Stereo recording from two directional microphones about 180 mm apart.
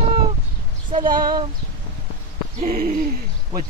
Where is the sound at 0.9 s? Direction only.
50° right (ahead or behind).